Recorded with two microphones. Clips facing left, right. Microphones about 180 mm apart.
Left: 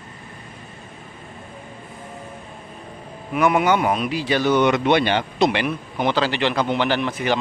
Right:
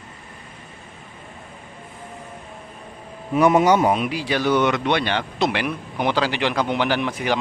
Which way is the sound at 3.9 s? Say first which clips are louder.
Left 1 dB; 10° right (ahead or behind).